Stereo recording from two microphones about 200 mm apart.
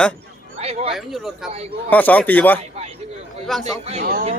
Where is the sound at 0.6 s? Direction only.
30° right (ahead or behind).